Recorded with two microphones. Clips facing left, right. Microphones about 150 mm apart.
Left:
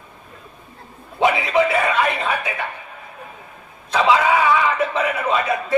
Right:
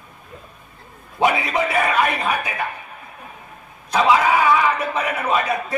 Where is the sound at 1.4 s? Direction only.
25° left (ahead or behind).